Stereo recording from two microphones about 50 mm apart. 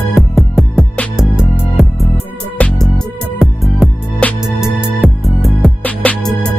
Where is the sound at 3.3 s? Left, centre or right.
Centre.